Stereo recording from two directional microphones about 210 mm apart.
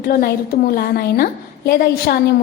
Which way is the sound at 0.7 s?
45° left (ahead or behind).